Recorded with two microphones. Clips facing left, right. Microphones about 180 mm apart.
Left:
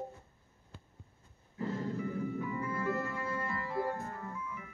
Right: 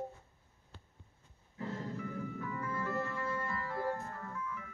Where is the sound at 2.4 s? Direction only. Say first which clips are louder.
Left 3 dB; 15° left (ahead or behind).